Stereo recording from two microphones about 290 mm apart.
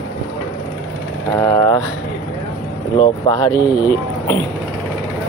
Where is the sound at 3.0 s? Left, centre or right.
Centre.